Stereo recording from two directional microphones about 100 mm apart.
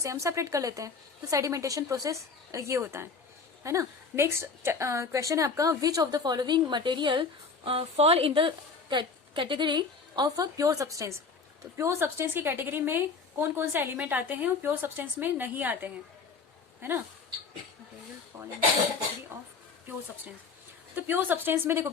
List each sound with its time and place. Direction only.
0.0 s a woman's voice: 30° right (ahead or behind)
18.3 s a woman's voice: 25° right (ahead or behind)
20.9 s a woman's voice: 20° right (ahead or behind)